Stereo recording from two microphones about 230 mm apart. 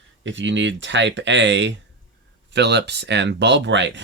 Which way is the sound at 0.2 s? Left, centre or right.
Right.